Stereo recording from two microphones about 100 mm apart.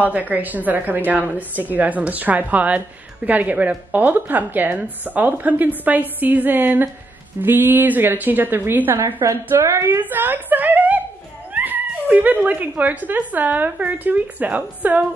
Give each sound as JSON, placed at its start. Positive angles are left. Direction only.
{"t": 0.0, "sound": "a woman's voice", "side_deg": -15}